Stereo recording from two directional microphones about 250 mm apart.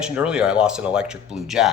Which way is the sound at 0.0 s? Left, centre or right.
Centre.